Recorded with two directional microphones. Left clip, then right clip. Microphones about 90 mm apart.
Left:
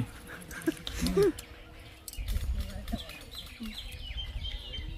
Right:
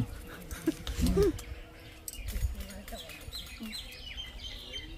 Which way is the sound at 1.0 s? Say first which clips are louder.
Right 1 dB; 30° left (ahead or behind).